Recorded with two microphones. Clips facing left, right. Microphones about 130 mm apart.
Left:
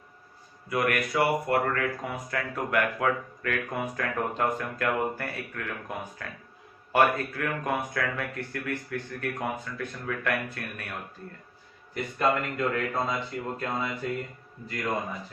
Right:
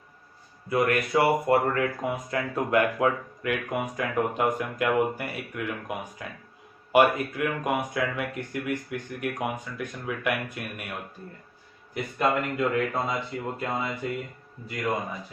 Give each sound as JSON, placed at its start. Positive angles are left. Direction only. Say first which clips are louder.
{"t": 0.7, "sound": "speech", "louder": "right 3 dB", "side_deg": -25}
{"t": 11.9, "sound": "speech", "louder": "right 1 dB", "side_deg": -10}
{"t": 13.6, "sound": "music", "louder": "right 2 dB", "side_deg": -5}